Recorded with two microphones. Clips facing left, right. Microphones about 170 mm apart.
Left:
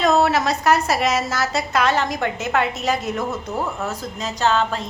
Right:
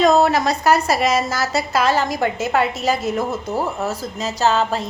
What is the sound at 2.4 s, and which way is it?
Speech, 35° right (ahead or behind).